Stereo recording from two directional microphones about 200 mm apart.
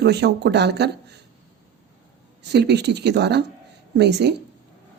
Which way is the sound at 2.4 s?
55° right (ahead or behind).